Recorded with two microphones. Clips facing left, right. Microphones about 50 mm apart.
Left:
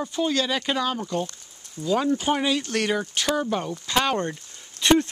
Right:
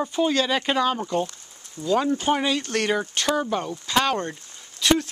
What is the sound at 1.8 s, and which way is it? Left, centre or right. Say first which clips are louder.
Speech: right 1 dB; centre.